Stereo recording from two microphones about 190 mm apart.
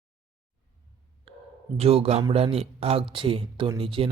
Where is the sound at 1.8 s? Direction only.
30° right (ahead or behind).